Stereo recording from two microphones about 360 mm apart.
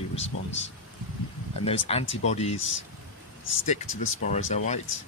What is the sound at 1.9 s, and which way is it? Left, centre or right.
Speech, centre.